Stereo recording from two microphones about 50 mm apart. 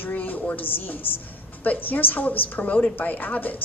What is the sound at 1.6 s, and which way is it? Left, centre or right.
A woman's voice, left.